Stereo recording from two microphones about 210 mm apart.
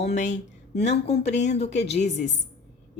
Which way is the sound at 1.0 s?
50° left (ahead or behind).